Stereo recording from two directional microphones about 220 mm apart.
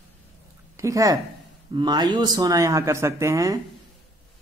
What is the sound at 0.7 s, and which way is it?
A woman's voice, 15° right (ahead or behind).